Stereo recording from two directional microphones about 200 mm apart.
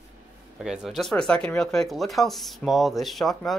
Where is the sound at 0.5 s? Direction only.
Centre (ahead or behind).